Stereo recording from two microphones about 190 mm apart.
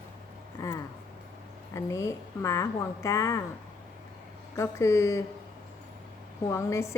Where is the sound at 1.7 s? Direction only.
15° left (ahead or behind).